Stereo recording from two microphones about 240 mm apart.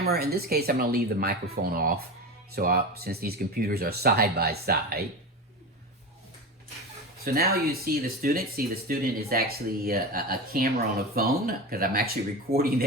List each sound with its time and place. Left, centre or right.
0.0 s speech: right
7.3 s speech: right